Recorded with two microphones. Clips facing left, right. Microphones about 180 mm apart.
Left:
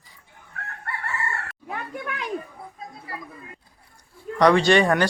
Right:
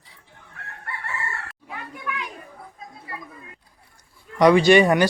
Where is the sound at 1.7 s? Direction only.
45° left (ahead or behind).